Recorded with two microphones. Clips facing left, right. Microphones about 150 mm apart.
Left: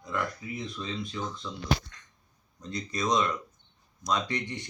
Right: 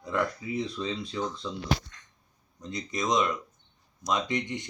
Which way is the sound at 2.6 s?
20° right (ahead or behind).